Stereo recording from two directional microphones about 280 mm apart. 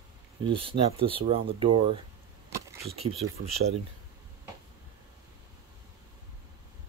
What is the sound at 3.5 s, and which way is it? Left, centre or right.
Speech, right.